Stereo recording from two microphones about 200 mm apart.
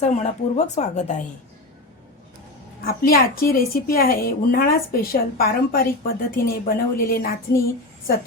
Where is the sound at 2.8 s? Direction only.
45° left (ahead or behind).